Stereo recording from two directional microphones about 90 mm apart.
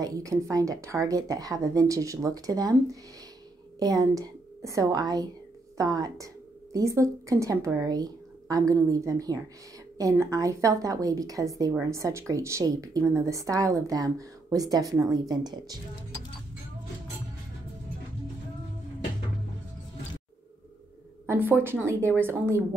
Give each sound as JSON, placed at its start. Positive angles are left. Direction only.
{"t": 0.0, "sound": "a woman's voice", "side_deg": -40}
{"t": 21.3, "sound": "a woman's voice", "side_deg": -20}